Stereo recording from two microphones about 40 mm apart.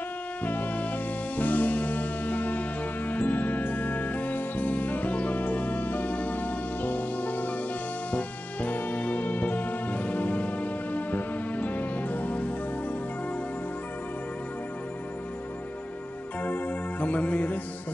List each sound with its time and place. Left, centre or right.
0.5 s music: left
16.4 s music: left